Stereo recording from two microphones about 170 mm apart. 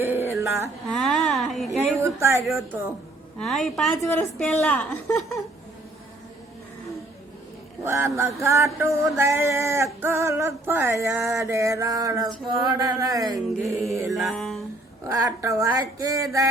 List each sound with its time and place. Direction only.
0.0 s a sound: 15° right (ahead or behind)
0.9 s speech: centre (ahead or behind)
2.0 s music: 15° right (ahead or behind)
3.3 s speech: 5° left (ahead or behind)
4.0 s a woman's voice: 15° left (ahead or behind)
7.9 s music: 15° right (ahead or behind)
12.5 s a sound: 25° right (ahead or behind)
13.8 s music: 15° right (ahead or behind)
14.1 s speech: centre (ahead or behind)
15.0 s a sound: 20° right (ahead or behind)